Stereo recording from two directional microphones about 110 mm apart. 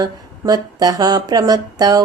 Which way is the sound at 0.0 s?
35° right (ahead or behind).